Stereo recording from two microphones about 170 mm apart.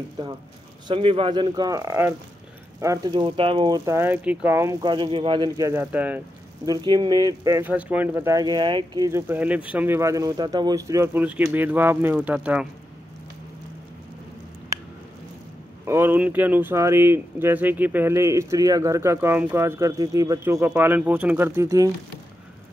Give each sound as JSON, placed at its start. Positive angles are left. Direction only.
{"t": 0.8, "sound": "speech", "side_deg": -30}
{"t": 6.6, "sound": "speech", "side_deg": -25}
{"t": 15.8, "sound": "speech", "side_deg": -15}